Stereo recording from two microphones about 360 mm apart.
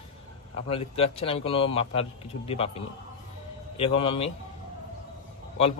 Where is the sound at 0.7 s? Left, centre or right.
Centre.